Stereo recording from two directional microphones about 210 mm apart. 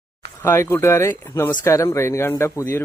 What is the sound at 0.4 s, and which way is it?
A man's voice, 10° left (ahead or behind).